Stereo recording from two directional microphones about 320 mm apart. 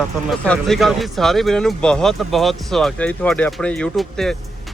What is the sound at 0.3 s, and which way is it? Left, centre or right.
Speech, centre.